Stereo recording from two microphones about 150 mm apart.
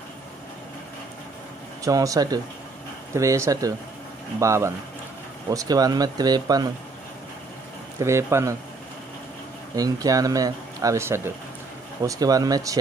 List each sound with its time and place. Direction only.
1.9 s speech: 25° right (ahead or behind)
8.0 s speech: 20° right (ahead or behind)
9.8 s speech: 25° right (ahead or behind)